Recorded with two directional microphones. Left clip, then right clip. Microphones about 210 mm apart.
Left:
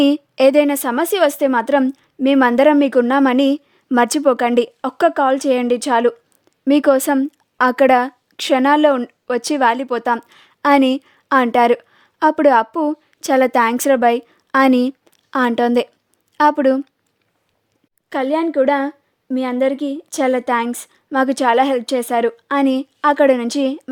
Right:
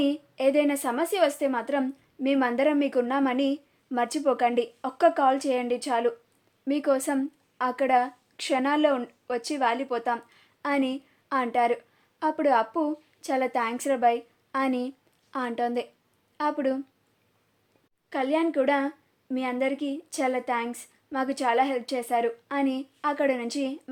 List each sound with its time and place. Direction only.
0.0 s a woman's voice: 55° left (ahead or behind)
18.1 s a woman's voice: 45° left (ahead or behind)